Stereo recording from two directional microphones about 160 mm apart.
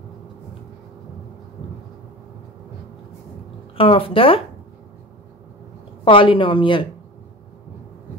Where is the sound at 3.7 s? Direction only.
35° left (ahead or behind).